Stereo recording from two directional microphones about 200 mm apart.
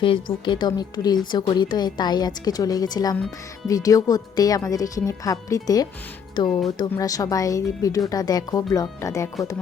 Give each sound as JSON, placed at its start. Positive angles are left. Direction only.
{"t": 0.4, "sound": "a woman's voice", "side_deg": 25}